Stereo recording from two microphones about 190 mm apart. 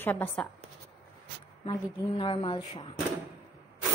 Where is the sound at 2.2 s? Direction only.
25° left (ahead or behind).